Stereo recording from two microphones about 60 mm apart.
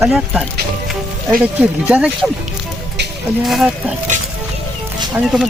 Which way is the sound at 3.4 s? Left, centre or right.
Centre.